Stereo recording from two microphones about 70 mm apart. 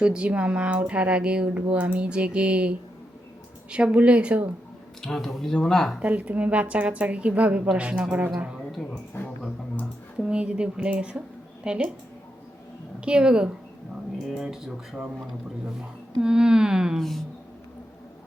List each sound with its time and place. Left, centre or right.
0.0 s speech: centre
5.0 s speech: centre
6.0 s a woman's voice: right
8.7 s speech: centre
10.2 s speech: centre
13.0 s speech: centre
14.3 s speech: centre
17.0 s speech: centre